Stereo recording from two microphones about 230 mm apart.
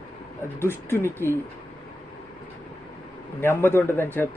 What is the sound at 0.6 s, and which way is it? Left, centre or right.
Speech, centre.